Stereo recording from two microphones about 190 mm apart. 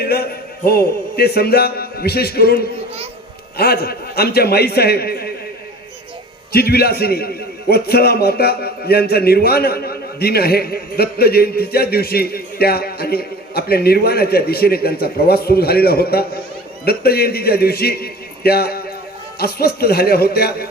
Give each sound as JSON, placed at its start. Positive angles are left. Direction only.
{"t": 0.0, "sound": "a man's voice", "side_deg": 55}
{"t": 6.5, "sound": "a man's voice", "side_deg": 55}